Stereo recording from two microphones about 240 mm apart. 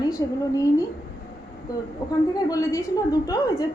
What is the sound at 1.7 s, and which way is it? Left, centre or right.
A woman's voice, centre.